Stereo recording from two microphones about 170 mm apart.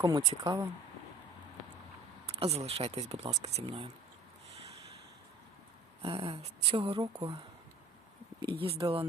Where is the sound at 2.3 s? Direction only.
35° right (ahead or behind).